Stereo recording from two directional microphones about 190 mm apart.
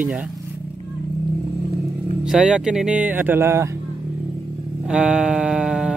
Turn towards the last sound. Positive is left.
turn(degrees=-5)  # may be behind; listen again after turning